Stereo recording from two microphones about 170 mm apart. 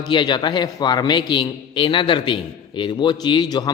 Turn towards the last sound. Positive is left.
turn(degrees=25)  # may be behind; listen again after turning